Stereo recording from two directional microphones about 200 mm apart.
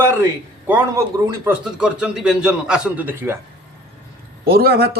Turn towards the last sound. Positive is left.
turn(degrees=-50)  # may be behind; listen again after turning